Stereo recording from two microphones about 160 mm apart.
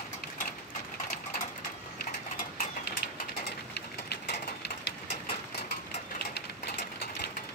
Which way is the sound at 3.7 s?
90° left.